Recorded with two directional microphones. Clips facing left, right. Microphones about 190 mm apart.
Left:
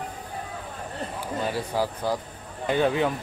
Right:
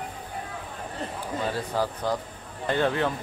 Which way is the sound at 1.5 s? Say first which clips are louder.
Left 1 dB; 10° left (ahead or behind).